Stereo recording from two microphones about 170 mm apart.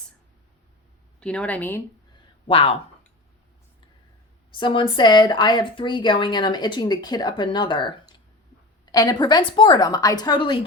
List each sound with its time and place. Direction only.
1.2 s speech: 5° left (ahead or behind)
2.5 s speech: 35° left (ahead or behind)
4.6 s speech: 30° left (ahead or behind)